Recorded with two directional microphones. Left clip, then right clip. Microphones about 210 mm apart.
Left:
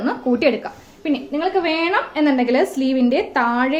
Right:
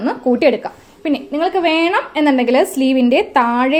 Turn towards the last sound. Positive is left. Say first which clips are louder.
# right 4 dB
turn(degrees=-25)  # may be behind; listen again after turning